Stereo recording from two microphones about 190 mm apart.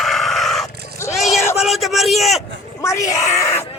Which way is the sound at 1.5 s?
Centre (ahead or behind).